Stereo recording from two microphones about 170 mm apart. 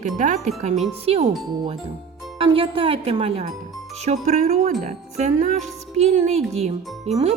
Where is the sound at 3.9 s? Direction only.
40° right (ahead or behind).